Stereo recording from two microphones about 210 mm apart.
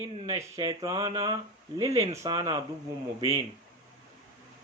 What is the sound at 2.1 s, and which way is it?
Speech, 15° right (ahead or behind).